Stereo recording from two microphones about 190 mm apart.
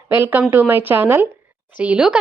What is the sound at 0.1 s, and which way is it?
A woman's voice, 10° right (ahead or behind).